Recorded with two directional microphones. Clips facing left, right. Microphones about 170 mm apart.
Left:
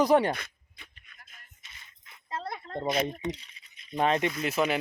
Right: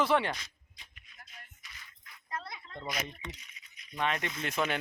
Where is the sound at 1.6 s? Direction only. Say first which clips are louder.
Right 1 dB; 25° left (ahead or behind).